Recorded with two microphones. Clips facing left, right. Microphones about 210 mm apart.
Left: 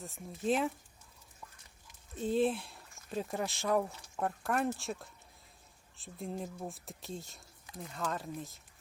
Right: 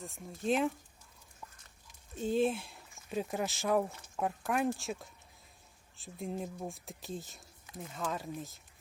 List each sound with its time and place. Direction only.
0.0 s speech: centre (ahead or behind)
1.9 s speech: centre (ahead or behind)